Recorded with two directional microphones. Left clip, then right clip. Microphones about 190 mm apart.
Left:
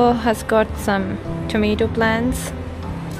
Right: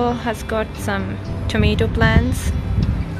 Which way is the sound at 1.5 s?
10° left (ahead or behind).